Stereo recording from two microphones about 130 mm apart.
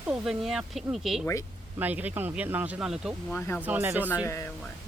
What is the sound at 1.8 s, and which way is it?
Speech, 15° right (ahead or behind).